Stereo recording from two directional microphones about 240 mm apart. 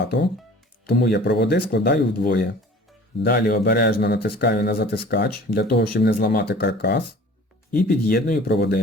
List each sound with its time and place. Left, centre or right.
0.9 s a man's voice: left